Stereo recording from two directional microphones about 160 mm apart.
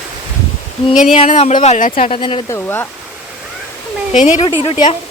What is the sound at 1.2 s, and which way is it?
Speech, 40° left (ahead or behind).